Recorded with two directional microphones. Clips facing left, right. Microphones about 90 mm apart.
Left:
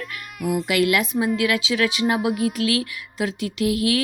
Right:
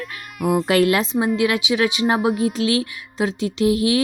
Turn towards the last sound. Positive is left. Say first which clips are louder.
# right 3 dB
turn(degrees=-25)  # may be behind; listen again after turning